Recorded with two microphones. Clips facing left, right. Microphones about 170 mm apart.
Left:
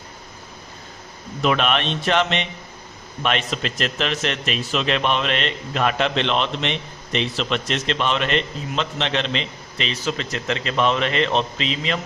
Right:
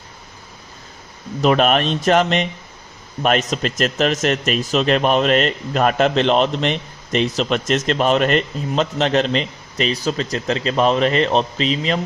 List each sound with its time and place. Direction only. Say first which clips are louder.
1.4 s a man's voice: right 5 dB; 40° right (ahead or behind)